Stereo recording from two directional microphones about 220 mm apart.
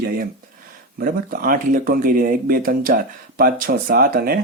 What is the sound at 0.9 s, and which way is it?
Speech, 40° right (ahead or behind).